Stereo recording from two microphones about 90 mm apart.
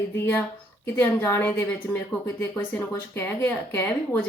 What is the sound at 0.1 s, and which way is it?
A woman's voice, 25° left (ahead or behind).